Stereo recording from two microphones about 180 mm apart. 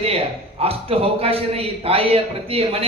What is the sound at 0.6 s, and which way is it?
A man's voice, 30° right (ahead or behind).